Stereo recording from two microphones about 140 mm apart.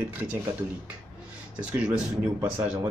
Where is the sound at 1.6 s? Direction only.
10° right (ahead or behind).